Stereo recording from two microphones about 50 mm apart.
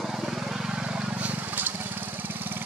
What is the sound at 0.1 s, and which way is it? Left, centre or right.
Vehicle, centre.